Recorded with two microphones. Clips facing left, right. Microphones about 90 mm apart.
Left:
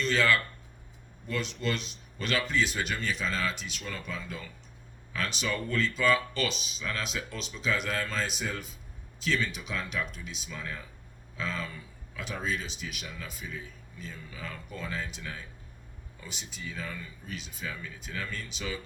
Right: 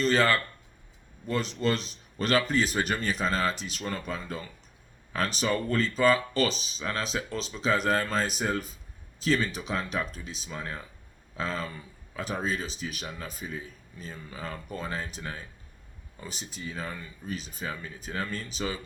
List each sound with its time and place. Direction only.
0.0 s speech: 40° right (ahead or behind)